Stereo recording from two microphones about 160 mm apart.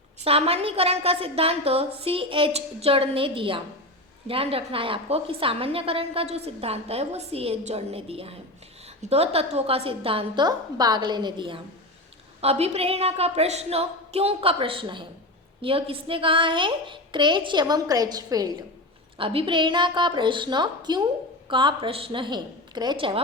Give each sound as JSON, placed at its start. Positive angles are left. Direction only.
{"t": 0.3, "sound": "a woman's voice", "side_deg": -40}
{"t": 19.1, "sound": "a woman's voice", "side_deg": -35}